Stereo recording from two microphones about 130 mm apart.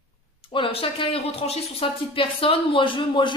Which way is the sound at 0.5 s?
45° left (ahead or behind).